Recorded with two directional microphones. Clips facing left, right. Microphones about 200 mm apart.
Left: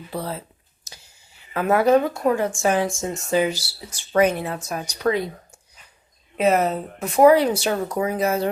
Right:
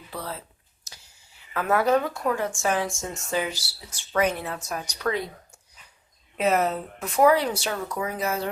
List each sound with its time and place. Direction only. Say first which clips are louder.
0.1 s speech: left 6 dB; 25° left (ahead or behind)
1.5 s speech: left 5 dB; 15° left (ahead or behind)
6.3 s speech: left 4 dB; 5° left (ahead or behind)
6.7 s speech: left 4 dB; 20° left (ahead or behind)
7.7 s speech: left 6 dB; 35° left (ahead or behind)